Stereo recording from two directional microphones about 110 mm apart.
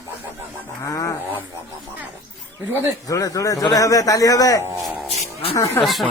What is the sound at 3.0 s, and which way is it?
Speech, 30° left (ahead or behind).